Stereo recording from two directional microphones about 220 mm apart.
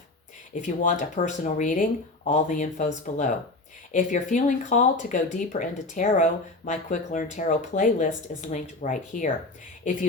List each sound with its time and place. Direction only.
0.5 s speech: 35° left (ahead or behind)